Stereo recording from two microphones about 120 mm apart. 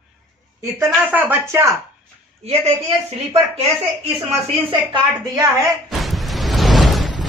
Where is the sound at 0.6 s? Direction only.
20° right (ahead or behind).